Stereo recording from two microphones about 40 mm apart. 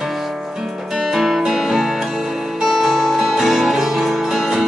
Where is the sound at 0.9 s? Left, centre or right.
Centre.